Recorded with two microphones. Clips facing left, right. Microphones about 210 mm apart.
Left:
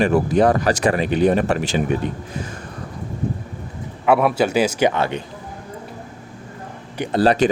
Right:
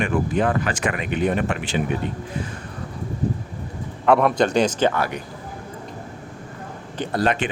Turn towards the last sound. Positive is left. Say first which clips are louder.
# left 6 dB
turn(degrees=35)  # may be behind; listen again after turning